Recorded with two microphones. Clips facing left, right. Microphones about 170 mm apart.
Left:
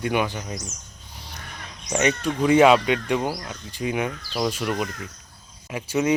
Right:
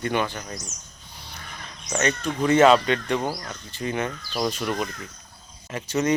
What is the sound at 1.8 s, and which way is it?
Speech, 10° left (ahead or behind).